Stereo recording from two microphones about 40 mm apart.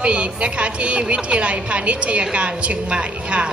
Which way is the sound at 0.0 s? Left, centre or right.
Right.